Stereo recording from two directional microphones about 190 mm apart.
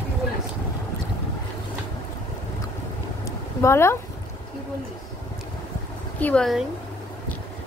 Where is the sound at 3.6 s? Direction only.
15° left (ahead or behind).